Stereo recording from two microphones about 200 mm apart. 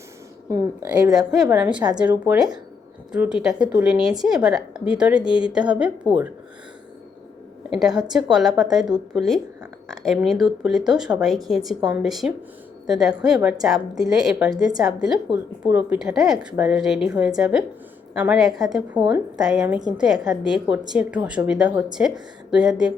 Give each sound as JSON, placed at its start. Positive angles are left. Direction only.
{"t": 0.5, "sound": "a woman's voice", "side_deg": -15}
{"t": 1.1, "sound": "a woman's voice", "side_deg": 0}
{"t": 7.7, "sound": "a woman's voice", "side_deg": 0}
{"t": 15.6, "sound": "a woman's voice", "side_deg": -5}